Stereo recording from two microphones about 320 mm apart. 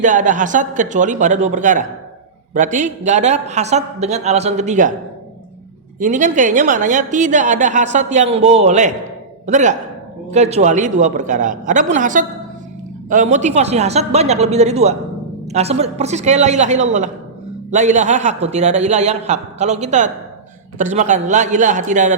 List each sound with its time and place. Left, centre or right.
0.0 s a woman's voice: right
6.0 s a woman's voice: right